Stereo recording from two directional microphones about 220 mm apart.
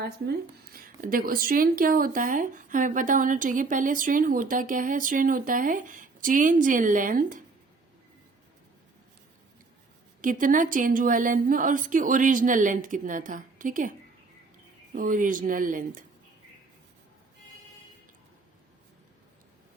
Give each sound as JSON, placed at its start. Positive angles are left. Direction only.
{"t": 0.7, "sound": "speech", "side_deg": -40}
{"t": 10.2, "sound": "speech", "side_deg": -35}
{"t": 14.9, "sound": "speech", "side_deg": -40}